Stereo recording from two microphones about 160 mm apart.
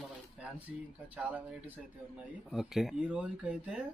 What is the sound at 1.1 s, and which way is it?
Speech, 10° right (ahead or behind).